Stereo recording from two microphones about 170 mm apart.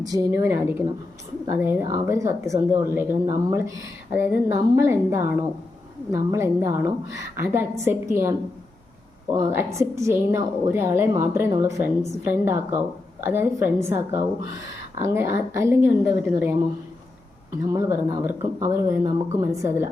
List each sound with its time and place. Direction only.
0.0 s a woman's voice: 20° right (ahead or behind)
17.7 s a woman's voice: 20° right (ahead or behind)